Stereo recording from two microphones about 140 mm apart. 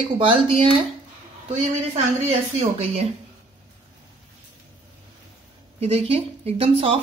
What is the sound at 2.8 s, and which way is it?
Speech, 50° right (ahead or behind).